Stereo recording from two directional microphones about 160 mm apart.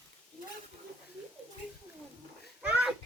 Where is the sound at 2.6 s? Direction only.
5° right (ahead or behind).